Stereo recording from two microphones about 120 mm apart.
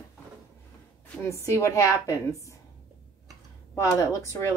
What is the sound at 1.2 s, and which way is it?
A woman's voice, 25° left (ahead or behind).